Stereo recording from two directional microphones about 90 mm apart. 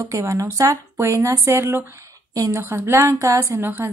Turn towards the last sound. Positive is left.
turn(degrees=-25)  # may be behind; listen again after turning